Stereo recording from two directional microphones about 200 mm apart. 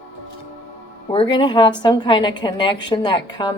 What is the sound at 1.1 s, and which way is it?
Speech, 25° left (ahead or behind).